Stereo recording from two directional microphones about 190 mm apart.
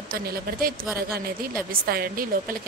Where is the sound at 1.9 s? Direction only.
50° right (ahead or behind).